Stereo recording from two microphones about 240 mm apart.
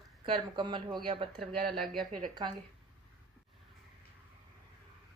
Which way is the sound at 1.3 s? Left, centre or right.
Centre.